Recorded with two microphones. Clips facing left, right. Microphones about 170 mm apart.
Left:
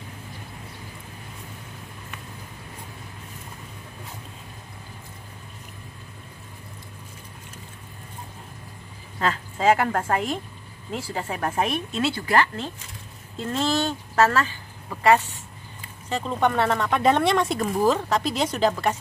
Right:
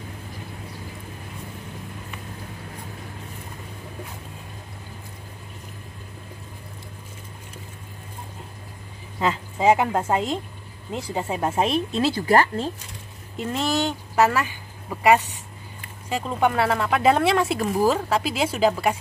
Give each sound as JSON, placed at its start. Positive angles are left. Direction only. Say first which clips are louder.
{"t": 9.2, "sound": "speech", "louder": "right 2 dB", "side_deg": -15}
{"t": 13.4, "sound": "speech", "louder": "even", "side_deg": -15}